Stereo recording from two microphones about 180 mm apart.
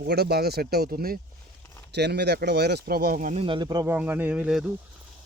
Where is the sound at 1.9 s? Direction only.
65° right (ahead or behind); by 3.4 s 50° right (ahead or behind).